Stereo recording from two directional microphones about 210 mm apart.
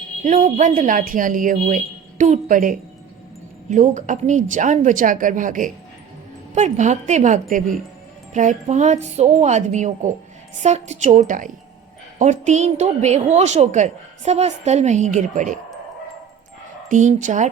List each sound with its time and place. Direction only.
0.3 s a woman's voice: 35° right (ahead or behind)
16.9 s a woman's voice: 35° right (ahead or behind)